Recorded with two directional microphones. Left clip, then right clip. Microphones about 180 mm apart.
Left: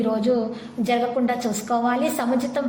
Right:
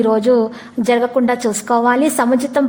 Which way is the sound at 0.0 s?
45° right (ahead or behind).